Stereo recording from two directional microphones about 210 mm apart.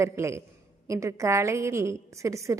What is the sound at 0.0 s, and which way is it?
A woman's voice, 15° right (ahead or behind).